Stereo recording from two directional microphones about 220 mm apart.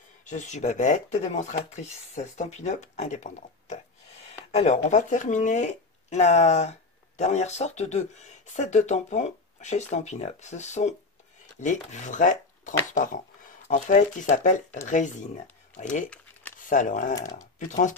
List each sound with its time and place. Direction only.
0.2 s speech: 35° left (ahead or behind)